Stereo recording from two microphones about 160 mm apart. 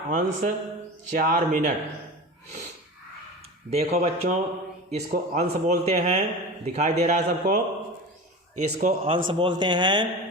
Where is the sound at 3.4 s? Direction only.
40° right (ahead or behind).